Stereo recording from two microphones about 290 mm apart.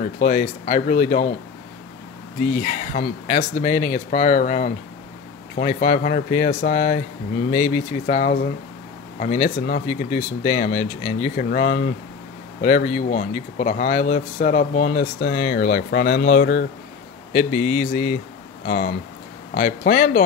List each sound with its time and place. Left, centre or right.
0.2 s speech: left
2.6 s speech: left